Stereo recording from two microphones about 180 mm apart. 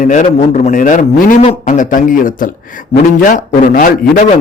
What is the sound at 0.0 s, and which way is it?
A man's voice, 45° left (ahead or behind).